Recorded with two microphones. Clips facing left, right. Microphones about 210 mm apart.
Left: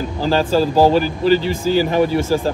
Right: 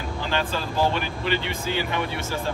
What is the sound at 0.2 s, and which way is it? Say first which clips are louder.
Speech: left 12 dB; 35° left (ahead or behind).